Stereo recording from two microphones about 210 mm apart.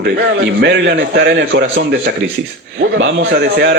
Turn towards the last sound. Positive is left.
turn(degrees=-50)  # may be behind; listen again after turning